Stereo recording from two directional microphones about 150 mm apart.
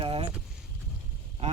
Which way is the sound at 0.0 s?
40° right (ahead or behind).